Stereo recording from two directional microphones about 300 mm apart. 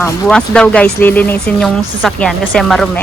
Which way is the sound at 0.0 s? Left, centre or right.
Centre.